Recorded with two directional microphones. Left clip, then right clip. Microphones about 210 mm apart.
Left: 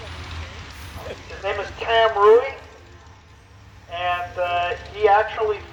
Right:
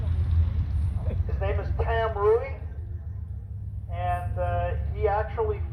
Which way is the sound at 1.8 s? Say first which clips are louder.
Left 9 dB; 25° right (ahead or behind).